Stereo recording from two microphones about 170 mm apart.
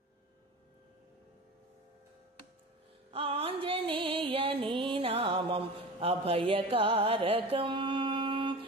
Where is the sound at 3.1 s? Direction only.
35° right (ahead or behind).